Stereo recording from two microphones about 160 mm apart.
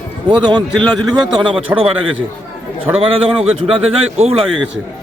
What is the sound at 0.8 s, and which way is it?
A man's voice, 25° right (ahead or behind).